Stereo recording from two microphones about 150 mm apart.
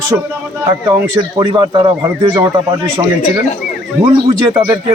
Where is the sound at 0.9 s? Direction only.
25° right (ahead or behind).